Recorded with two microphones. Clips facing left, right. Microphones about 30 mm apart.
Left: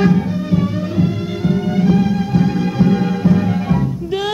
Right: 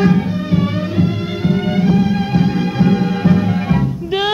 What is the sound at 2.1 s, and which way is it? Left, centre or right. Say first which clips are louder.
Music: right 1 dB; right.